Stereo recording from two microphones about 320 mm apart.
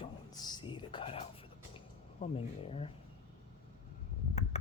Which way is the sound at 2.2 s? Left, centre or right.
Centre.